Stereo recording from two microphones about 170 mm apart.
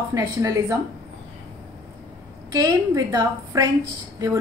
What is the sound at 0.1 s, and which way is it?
Speech, 20° right (ahead or behind).